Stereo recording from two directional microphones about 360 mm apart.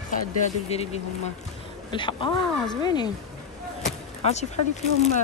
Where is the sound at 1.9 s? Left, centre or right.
Centre.